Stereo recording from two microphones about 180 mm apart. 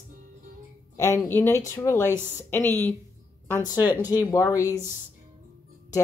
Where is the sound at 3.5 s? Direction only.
20° left (ahead or behind).